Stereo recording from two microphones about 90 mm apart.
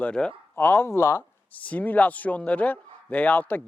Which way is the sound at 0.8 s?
30° left (ahead or behind).